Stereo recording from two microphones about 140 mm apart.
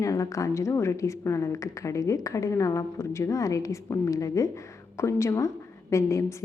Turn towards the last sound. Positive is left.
turn(degrees=20)  # may be behind; listen again after turning